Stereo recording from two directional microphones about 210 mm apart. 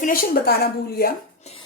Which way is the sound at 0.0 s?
45° left (ahead or behind).